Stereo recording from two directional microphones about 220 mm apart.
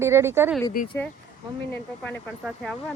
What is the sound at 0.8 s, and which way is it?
Speech, 40° left (ahead or behind).